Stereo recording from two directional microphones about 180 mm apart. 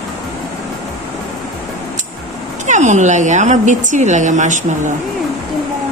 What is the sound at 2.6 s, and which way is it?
Speech, 40° right (ahead or behind).